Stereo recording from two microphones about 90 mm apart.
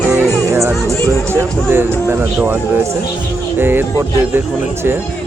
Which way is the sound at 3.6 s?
25° right (ahead or behind).